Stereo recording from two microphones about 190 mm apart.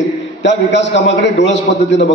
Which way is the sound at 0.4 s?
70° left (ahead or behind).